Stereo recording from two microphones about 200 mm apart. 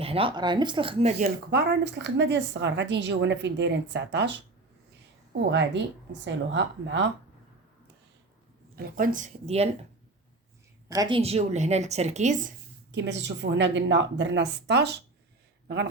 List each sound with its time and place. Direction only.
0.0 s speech: 30° right (ahead or behind)
1.5 s a woman's voice: 55° right (ahead or behind)
5.5 s a woman's voice: 65° right (ahead or behind)
8.8 s a woman's voice: 40° right (ahead or behind)
10.8 s a woman's voice: 20° right (ahead or behind); by 12.5 s 40° right (ahead or behind)
12.9 s a woman's voice: 60° right (ahead or behind)